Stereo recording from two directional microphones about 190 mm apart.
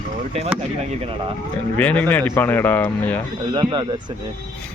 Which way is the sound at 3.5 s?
25° right (ahead or behind).